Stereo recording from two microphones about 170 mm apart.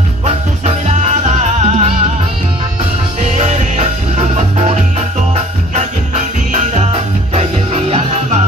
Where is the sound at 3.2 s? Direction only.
45° right (ahead or behind).